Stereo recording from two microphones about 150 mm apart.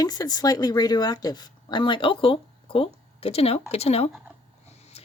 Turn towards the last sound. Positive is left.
turn(degrees=45)  # may be behind; listen again after turning